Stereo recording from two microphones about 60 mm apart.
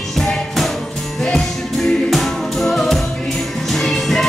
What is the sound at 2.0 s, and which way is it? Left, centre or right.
Music, centre.